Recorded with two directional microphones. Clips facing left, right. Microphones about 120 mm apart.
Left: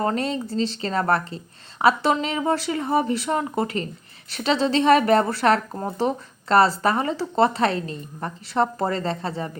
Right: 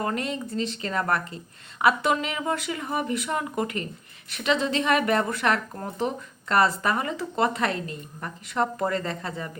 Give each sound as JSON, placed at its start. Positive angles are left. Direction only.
{"t": 0.0, "sound": "speech", "side_deg": 35}